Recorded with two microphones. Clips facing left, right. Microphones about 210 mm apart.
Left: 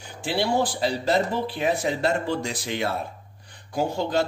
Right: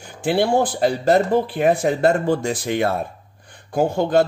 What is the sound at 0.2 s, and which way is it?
A man's voice, 50° right (ahead or behind).